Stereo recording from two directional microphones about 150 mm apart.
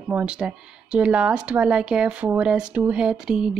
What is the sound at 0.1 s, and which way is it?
Speech, 5° right (ahead or behind).